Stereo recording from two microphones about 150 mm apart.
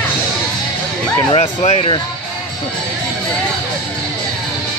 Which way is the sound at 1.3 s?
45° left (ahead or behind).